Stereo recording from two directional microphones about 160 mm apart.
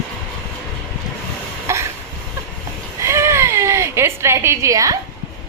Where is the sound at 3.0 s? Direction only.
15° right (ahead or behind).